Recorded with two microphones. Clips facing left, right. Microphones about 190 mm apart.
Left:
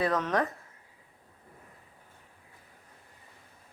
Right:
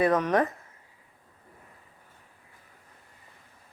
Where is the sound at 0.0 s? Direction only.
15° right (ahead or behind).